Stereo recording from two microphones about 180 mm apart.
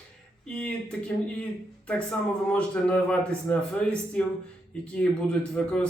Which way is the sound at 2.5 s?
5° left (ahead or behind).